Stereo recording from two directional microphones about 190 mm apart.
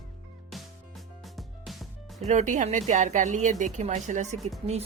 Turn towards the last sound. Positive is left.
turn(degrees=0)  # may be behind; listen again after turning